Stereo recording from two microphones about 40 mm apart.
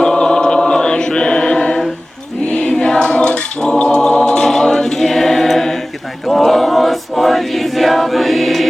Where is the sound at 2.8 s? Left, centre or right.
Left.